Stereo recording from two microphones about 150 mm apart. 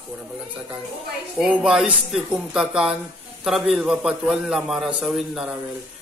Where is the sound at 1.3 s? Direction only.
5° right (ahead or behind).